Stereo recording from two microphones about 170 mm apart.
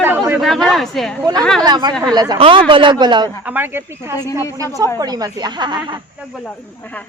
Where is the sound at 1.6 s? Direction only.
25° right (ahead or behind).